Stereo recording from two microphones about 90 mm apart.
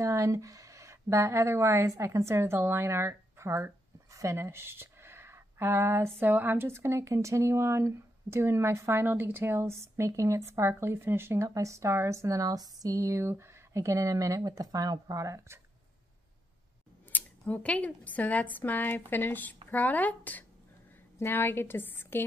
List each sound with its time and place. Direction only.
0.0 s a woman's voice: 35° right (ahead or behind)
17.1 s speech: 15° left (ahead or behind)